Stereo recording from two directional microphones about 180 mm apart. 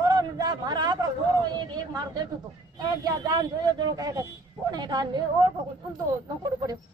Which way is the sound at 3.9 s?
20° right (ahead or behind).